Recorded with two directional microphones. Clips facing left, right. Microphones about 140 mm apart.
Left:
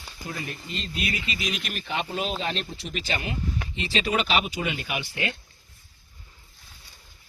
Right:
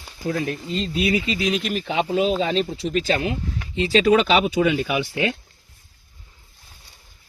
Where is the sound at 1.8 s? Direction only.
90° right.